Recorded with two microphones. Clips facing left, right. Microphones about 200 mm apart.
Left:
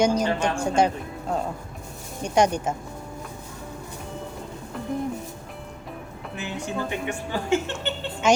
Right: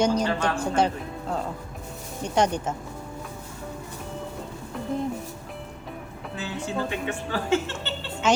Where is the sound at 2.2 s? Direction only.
10° left (ahead or behind).